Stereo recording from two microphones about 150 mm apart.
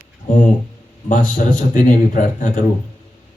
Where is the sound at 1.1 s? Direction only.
60° left (ahead or behind).